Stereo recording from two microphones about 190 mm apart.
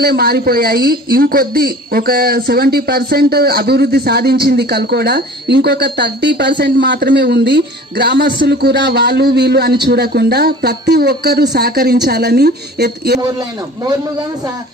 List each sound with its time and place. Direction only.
0.0 s speech: 55° right (ahead or behind)